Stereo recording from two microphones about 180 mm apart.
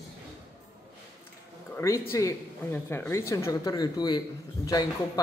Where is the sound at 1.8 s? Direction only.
15° left (ahead or behind).